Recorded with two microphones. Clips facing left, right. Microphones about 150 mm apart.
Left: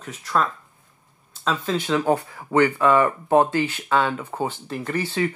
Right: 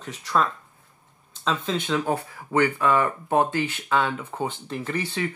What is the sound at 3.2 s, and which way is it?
Speech, 35° left (ahead or behind).